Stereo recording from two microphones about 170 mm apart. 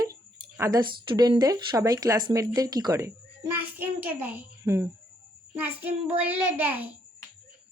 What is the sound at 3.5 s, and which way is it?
A woman's voice, 10° right (ahead or behind).